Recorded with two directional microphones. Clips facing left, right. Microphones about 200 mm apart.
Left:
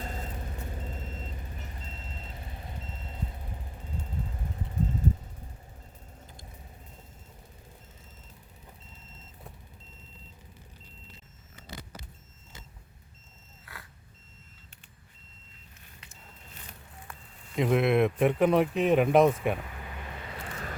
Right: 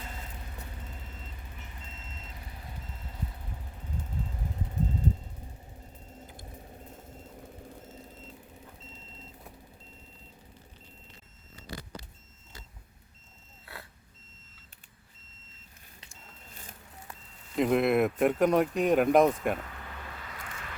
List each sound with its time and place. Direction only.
0.0 s vehicle: 40° left (ahead or behind)
17.5 s speech: centre (ahead or behind)
19.5 s a sound: 15° left (ahead or behind); by 20.7 s 35° left (ahead or behind)